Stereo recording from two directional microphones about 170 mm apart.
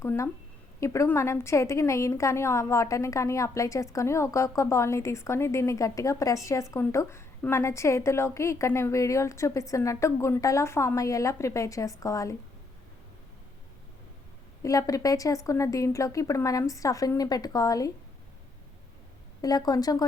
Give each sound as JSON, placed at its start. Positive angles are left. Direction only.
{"t": 0.0, "sound": "a woman's voice", "side_deg": 15}
{"t": 14.6, "sound": "a woman's voice", "side_deg": 20}
{"t": 19.4, "sound": "a woman's voice", "side_deg": 20}